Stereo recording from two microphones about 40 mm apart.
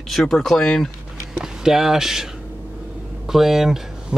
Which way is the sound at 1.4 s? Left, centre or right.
Centre.